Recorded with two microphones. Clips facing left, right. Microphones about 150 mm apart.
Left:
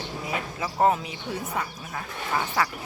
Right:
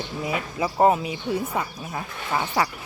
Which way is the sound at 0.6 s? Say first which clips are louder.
Right 4 dB; 15° right (ahead or behind).